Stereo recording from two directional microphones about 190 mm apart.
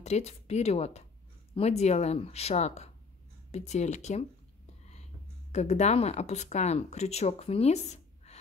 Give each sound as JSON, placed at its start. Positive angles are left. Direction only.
{"t": 0.0, "sound": "speech", "side_deg": 35}
{"t": 5.5, "sound": "speech", "side_deg": 35}